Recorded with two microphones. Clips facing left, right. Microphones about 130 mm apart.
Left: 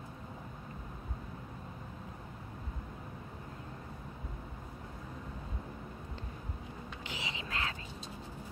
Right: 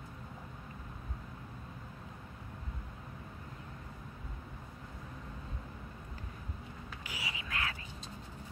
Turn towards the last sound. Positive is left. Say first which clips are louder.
# left 1 dB
turn(degrees=25)  # may be behind; listen again after turning